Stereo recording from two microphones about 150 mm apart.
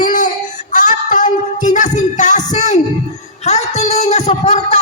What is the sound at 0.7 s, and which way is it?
Music, 60° left (ahead or behind).